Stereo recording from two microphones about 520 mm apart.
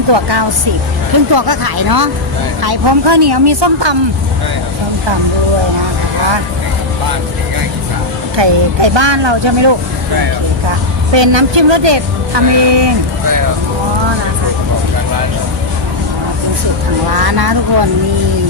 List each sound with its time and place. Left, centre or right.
0.1 s speech: right
8.4 s speech: right
11.1 s a woman's voice: right
17.2 s speech: right